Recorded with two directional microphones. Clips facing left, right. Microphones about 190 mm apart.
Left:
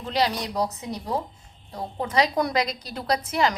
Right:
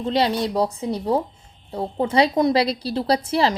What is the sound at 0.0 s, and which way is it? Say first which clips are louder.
A woman's voice: right 5 dB; 25° right (ahead or behind).